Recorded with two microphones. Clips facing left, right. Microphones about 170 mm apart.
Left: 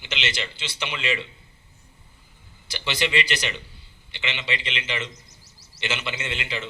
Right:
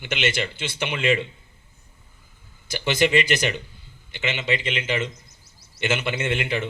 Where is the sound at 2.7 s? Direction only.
50° right (ahead or behind).